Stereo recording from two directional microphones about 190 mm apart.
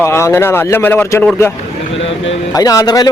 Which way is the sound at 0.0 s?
15° left (ahead or behind).